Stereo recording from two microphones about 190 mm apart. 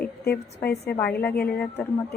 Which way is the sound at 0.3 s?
60° left (ahead or behind).